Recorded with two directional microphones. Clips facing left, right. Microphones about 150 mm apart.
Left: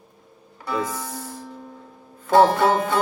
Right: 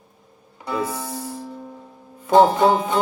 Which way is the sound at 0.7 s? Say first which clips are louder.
Right 1 dB; 25° right (ahead or behind).